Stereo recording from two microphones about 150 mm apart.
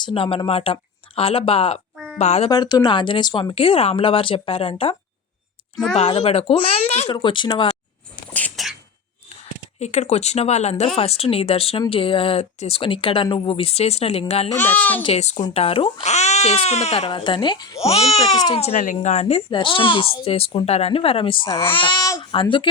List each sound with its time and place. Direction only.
0.0 s speech: 35° left (ahead or behind)
2.5 s speech: 25° left (ahead or behind)
3.5 s speech: 40° left (ahead or behind)
5.7 s a woman's voice: centre (ahead or behind)
6.0 s speech: 45° left (ahead or behind)
7.1 s speech: 35° left (ahead or behind)
8.3 s a sound: 10° left (ahead or behind)
9.8 s speech: 50° left (ahead or behind)
14.6 s a child's voice: 10° left (ahead or behind)
15.0 s speech: 45° left (ahead or behind); by 17.7 s 30° left (ahead or behind)
17.7 s speech: 45° left (ahead or behind)
18.3 s speech: 30° left (ahead or behind)
18.6 s speech: 50° left (ahead or behind); by 22.3 s 25° left (ahead or behind)
22.3 s speech: 35° left (ahead or behind)